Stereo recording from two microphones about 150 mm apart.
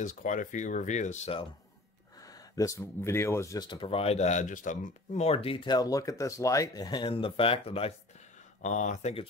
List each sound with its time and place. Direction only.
0.0 s speech: 60° left (ahead or behind)
2.5 s speech: 20° left (ahead or behind); by 7.9 s 40° left (ahead or behind)
8.6 s speech: 55° left (ahead or behind)